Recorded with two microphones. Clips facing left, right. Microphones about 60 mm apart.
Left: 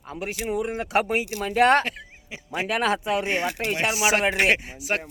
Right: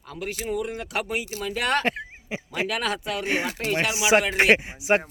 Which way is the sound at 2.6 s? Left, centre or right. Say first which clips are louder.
Left 3 dB; left.